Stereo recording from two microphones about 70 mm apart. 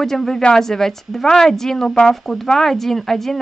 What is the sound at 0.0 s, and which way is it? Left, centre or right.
Speech, centre.